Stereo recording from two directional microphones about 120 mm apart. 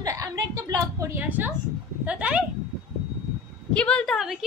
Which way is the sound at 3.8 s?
10° left (ahead or behind).